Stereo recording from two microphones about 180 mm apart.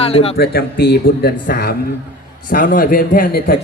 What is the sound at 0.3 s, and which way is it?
A man's voice, 60° left (ahead or behind).